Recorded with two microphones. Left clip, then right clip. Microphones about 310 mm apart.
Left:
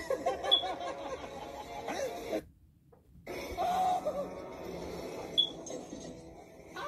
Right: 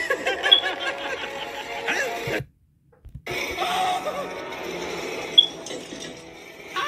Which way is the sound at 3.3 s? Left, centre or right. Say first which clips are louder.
Right 8 dB; right.